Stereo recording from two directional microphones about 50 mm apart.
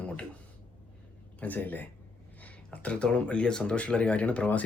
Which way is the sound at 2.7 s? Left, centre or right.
Left.